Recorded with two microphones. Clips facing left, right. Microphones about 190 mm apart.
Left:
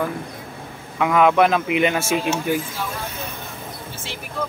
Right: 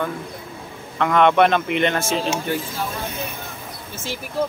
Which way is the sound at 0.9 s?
5° left (ahead or behind).